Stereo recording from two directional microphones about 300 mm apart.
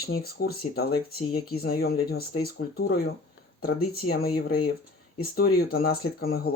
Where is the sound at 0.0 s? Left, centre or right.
Left.